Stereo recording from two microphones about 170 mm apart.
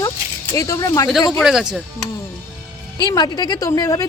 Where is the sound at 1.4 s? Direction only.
5° right (ahead or behind).